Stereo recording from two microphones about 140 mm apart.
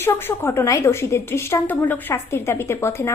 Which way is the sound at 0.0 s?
15° left (ahead or behind).